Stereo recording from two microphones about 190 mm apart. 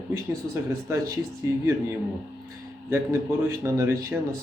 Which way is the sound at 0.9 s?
15° right (ahead or behind).